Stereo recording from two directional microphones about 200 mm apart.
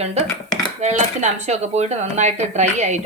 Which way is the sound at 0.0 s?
30° right (ahead or behind).